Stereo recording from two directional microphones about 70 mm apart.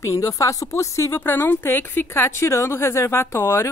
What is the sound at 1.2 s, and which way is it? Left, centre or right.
A woman's voice, left.